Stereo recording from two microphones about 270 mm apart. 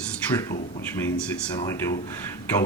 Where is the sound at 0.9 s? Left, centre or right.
Centre.